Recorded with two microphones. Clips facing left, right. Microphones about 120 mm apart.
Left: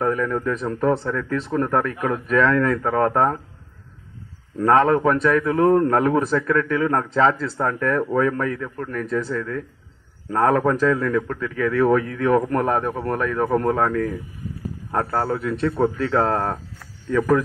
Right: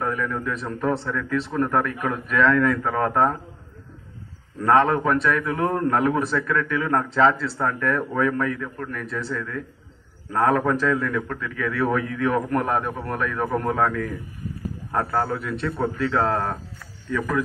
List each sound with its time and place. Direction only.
0.1 s a man's voice: 40° left (ahead or behind)
4.6 s a man's voice: 25° left (ahead or behind)